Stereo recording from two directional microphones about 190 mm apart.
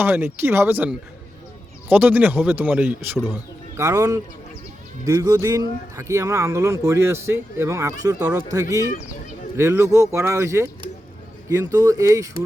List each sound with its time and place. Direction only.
0.0 s speech: 10° right (ahead or behind)